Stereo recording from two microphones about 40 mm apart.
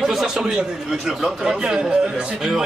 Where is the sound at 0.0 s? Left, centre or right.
Centre.